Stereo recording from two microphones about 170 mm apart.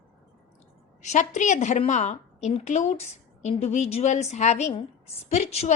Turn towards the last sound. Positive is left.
turn(degrees=40)  # may be behind; listen again after turning